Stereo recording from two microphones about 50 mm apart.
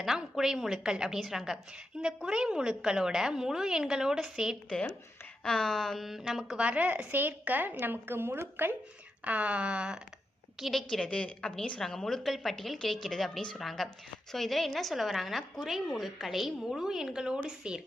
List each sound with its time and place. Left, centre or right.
0.0 s a sound: centre
0.9 s a woman's voice: centre
5.4 s a woman's voice: centre
6.6 s a woman's voice: right
9.2 s speech: right
10.6 s a woman's voice: centre
10.8 s a woman's voice: centre
11.8 s a woman's voice: centre